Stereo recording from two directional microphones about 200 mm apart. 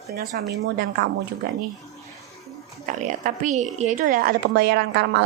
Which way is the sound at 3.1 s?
40° right (ahead or behind).